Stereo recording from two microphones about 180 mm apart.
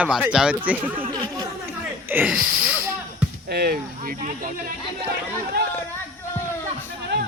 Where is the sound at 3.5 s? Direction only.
60° right (ahead or behind).